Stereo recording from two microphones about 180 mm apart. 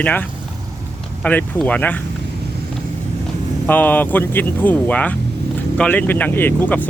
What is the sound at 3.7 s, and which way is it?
Speech, 10° left (ahead or behind).